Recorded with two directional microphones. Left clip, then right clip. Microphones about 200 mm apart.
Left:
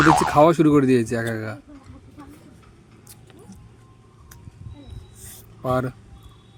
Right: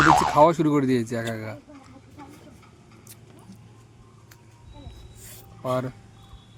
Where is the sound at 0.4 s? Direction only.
15° left (ahead or behind).